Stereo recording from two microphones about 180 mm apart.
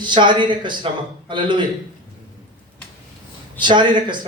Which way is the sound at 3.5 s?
25° right (ahead or behind).